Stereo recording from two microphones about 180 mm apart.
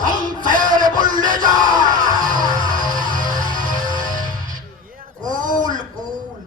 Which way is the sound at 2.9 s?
45° right (ahead or behind).